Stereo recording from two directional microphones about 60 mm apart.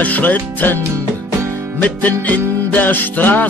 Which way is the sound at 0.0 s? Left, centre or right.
Left.